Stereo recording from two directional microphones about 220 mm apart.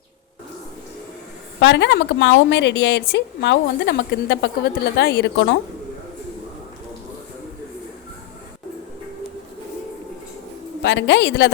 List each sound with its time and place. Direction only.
1.6 s a woman's voice: 55° left (ahead or behind)
10.8 s a woman's voice: 50° left (ahead or behind)